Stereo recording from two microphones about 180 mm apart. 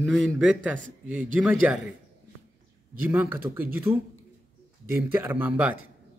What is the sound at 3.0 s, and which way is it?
Speech, 10° right (ahead or behind).